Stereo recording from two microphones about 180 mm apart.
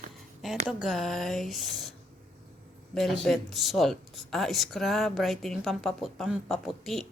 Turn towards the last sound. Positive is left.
turn(degrees=0)  # may be behind; listen again after turning